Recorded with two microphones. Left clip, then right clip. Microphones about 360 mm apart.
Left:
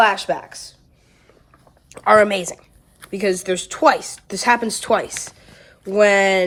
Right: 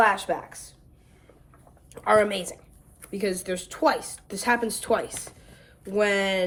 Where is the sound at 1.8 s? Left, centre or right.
Left.